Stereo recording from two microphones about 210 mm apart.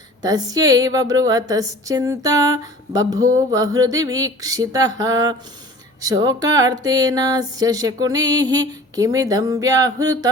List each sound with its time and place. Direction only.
0.2 s a woman's voice: 15° right (ahead or behind)